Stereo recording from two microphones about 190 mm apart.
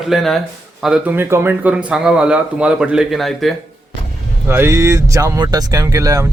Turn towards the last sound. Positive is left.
turn(degrees=-20)  # may be behind; listen again after turning